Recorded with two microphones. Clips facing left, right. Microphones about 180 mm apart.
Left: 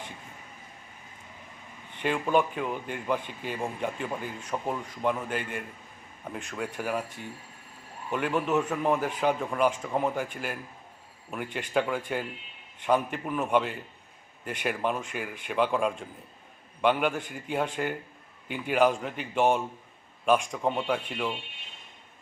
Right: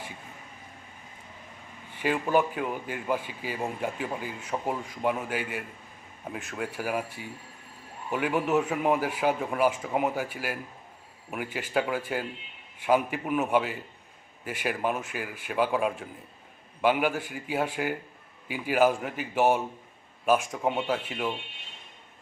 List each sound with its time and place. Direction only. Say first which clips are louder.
2.0 s a man's voice: even; 5° right (ahead or behind)